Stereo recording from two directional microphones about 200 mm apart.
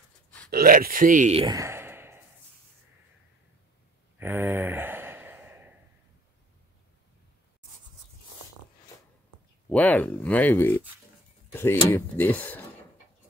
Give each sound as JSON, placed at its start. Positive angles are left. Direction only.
{"t": 0.5, "sound": "speech", "side_deg": -45}
{"t": 1.4, "sound": "sigh", "side_deg": -15}
{"t": 4.2, "sound": "sigh", "side_deg": -10}
{"t": 9.7, "sound": "speech", "side_deg": 5}
{"t": 11.5, "sound": "a sound", "side_deg": 10}
{"t": 11.9, "sound": "speech", "side_deg": 10}